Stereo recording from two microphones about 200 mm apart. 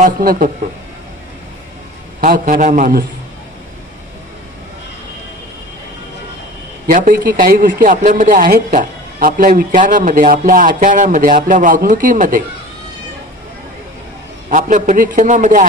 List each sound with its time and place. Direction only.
0.0 s a man's voice: 45° right (ahead or behind)
2.1 s a man's voice: 40° right (ahead or behind)
6.9 s speech: 40° right (ahead or behind)
14.5 s speech: 40° right (ahead or behind)